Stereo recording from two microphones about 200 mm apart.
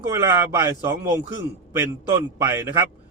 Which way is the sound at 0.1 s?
15° right (ahead or behind).